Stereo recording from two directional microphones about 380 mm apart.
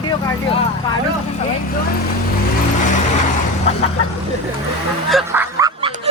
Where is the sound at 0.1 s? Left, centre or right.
Centre.